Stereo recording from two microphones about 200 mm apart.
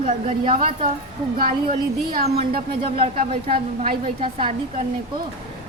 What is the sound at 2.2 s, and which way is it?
Speech, 30° right (ahead or behind).